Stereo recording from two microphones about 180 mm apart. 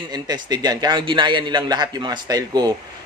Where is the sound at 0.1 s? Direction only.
20° right (ahead or behind).